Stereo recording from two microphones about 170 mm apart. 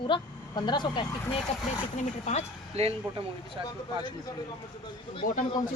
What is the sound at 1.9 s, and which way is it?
Speech, 45° left (ahead or behind).